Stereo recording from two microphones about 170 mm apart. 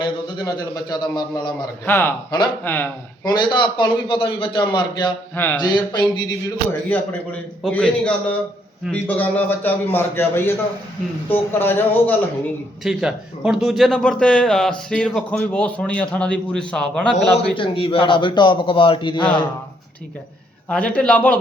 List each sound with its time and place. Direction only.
0.0 s a man's voice: 25° left (ahead or behind)
1.9 s a man's voice: 15° left (ahead or behind)
3.2 s a man's voice: 25° left (ahead or behind)
6.7 s a man's voice: 10° left (ahead or behind)
12.8 s a man's voice: 5° right (ahead or behind)
17.5 s a man's voice: 30° left (ahead or behind)
20.7 s a man's voice: 5° left (ahead or behind)